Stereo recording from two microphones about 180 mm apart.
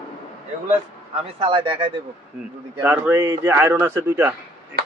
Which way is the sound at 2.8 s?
10° right (ahead or behind).